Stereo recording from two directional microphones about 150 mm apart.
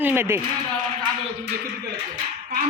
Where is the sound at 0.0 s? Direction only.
15° right (ahead or behind).